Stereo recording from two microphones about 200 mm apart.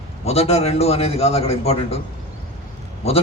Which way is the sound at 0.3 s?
30° left (ahead or behind).